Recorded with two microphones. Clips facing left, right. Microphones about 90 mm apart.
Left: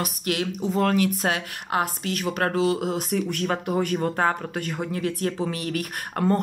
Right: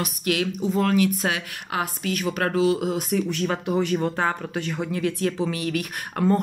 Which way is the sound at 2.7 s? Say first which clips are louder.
Right 1 dB; 50° left (ahead or behind).